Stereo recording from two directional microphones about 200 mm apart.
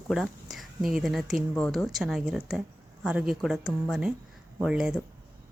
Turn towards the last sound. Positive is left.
turn(degrees=-5)  # may be behind; listen again after turning